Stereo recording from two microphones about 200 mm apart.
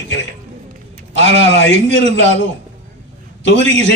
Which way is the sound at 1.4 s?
65° left (ahead or behind).